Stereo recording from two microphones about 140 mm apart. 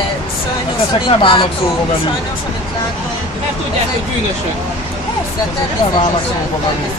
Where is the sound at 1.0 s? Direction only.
40° left (ahead or behind).